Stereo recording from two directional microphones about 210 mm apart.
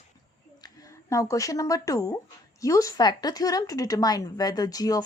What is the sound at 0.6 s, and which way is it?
A woman's voice, 15° left (ahead or behind).